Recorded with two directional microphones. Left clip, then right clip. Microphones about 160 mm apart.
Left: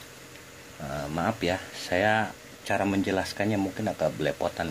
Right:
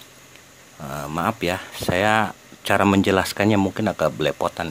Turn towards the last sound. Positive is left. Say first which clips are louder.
# right 6 dB
turn(degrees=-35)  # may be behind; listen again after turning